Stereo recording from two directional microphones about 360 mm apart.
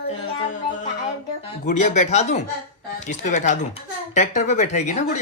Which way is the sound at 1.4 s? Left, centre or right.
Centre.